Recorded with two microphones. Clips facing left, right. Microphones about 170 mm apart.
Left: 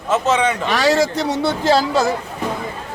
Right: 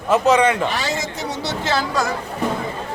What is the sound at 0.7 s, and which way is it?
Speech, 85° left.